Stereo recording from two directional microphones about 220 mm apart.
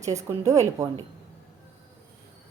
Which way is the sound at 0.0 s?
30° right (ahead or behind).